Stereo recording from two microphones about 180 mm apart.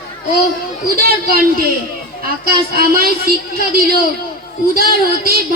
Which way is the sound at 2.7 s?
55° right (ahead or behind).